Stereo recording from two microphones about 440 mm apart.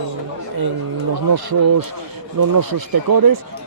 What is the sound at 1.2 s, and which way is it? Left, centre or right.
Speech, right.